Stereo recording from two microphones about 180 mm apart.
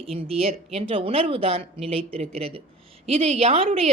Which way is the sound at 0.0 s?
35° right (ahead or behind).